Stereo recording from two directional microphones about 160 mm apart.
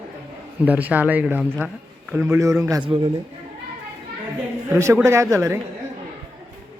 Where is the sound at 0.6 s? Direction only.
10° right (ahead or behind).